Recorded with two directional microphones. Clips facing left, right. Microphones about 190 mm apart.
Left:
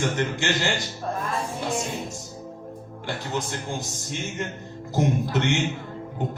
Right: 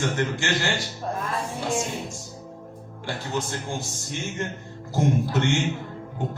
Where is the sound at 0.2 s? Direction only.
20° left (ahead or behind).